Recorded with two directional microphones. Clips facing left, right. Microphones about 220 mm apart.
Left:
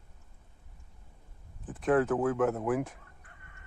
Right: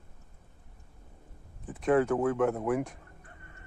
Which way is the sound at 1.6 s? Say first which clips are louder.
Right 1 dB; centre (ahead or behind).